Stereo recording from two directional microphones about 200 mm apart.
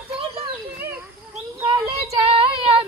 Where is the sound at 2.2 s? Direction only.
30° right (ahead or behind).